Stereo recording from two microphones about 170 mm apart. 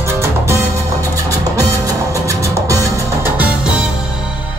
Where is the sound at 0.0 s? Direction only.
15° right (ahead or behind).